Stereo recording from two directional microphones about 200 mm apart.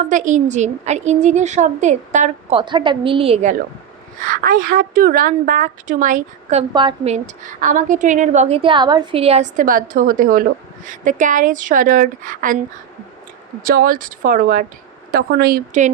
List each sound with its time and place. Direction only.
0.1 s a woman's voice: 40° right (ahead or behind)
2.6 s a woman's voice: 25° right (ahead or behind)
4.2 s a woman's voice: 45° right (ahead or behind)
13.6 s speech: 45° right (ahead or behind)